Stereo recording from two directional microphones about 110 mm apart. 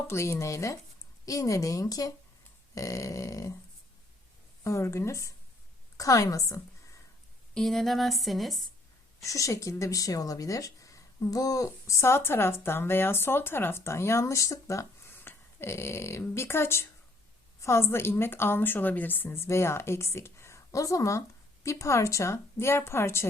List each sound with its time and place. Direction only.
0.1 s speech: 25° left (ahead or behind)
4.6 s speech: 25° left (ahead or behind)
7.5 s speech: 5° left (ahead or behind)
9.2 s speech: 30° left (ahead or behind)